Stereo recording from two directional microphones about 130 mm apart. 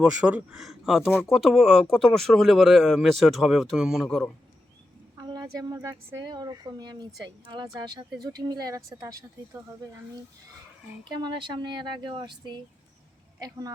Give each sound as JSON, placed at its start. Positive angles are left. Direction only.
{"t": 0.0, "sound": "speech", "side_deg": -10}
{"t": 5.1, "sound": "a woman's voice", "side_deg": -30}
{"t": 11.0, "sound": "a woman's voice", "side_deg": -35}